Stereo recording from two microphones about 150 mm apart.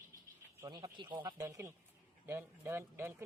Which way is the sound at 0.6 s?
25° right (ahead or behind).